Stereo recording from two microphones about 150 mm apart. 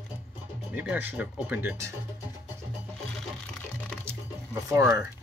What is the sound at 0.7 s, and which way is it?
Speech, 10° right (ahead or behind).